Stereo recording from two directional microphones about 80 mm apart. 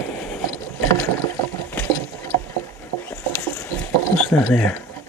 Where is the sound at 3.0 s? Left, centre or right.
Left.